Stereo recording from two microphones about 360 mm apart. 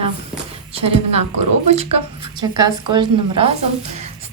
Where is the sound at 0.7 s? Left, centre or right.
Centre.